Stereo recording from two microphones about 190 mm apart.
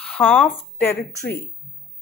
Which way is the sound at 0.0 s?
5° left (ahead or behind).